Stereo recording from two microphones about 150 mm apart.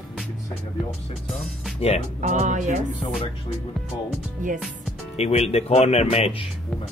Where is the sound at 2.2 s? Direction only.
55° right (ahead or behind).